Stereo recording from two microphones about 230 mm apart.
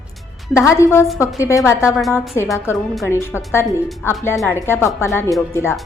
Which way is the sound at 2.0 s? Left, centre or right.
Centre.